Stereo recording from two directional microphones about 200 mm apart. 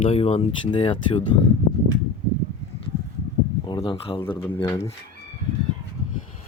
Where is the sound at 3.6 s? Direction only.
25° left (ahead or behind).